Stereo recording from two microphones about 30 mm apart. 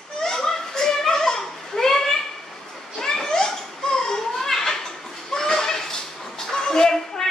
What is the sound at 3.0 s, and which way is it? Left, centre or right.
Children playing, left.